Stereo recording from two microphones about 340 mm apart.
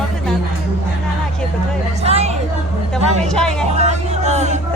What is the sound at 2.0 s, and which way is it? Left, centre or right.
Chatter, centre.